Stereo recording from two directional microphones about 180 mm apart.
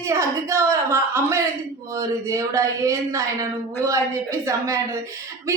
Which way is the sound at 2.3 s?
15° right (ahead or behind).